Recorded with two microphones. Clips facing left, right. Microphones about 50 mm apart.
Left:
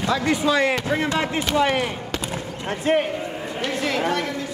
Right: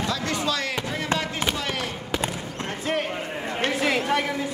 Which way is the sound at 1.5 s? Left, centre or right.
Left.